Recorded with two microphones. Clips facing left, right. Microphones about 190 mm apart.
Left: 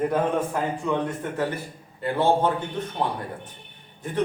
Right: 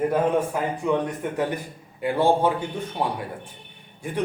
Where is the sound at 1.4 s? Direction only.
15° right (ahead or behind).